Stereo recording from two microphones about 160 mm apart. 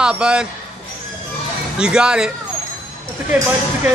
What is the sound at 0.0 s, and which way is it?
Speech, 5° right (ahead or behind).